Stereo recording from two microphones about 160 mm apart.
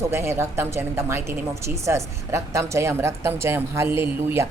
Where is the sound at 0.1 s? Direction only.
15° right (ahead or behind).